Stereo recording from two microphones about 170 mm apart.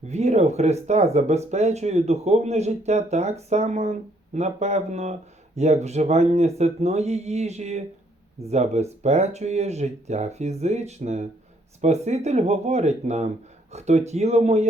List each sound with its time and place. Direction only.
0.1 s speech: 40° right (ahead or behind)